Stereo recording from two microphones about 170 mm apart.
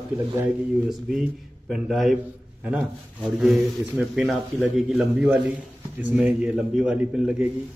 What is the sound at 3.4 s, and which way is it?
A man's voice, 5° right (ahead or behind).